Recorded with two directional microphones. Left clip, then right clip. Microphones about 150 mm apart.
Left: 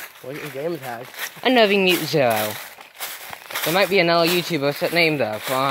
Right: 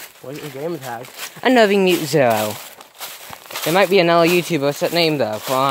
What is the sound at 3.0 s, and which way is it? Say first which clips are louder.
Walk: left 1 dB; 15° left (ahead or behind).